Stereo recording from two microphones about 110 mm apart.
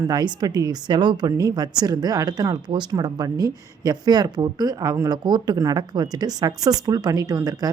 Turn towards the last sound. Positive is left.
turn(degrees=-35)  # may be behind; listen again after turning